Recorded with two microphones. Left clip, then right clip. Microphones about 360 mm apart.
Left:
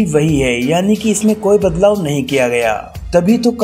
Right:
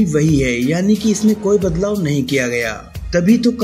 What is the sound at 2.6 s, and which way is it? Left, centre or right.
Speech, centre.